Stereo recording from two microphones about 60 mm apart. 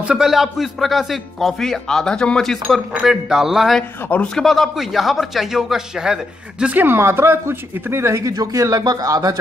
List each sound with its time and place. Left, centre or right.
0.1 s a man's voice: centre
3.0 s a man's voice: centre
6.7 s speech: right
7.0 s speech: right
8.3 s speech: right